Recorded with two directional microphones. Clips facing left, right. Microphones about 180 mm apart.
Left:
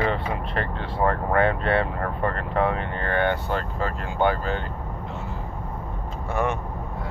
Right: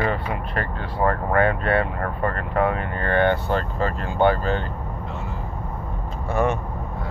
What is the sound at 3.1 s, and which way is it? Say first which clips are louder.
Speech: right 4 dB; 10° left (ahead or behind).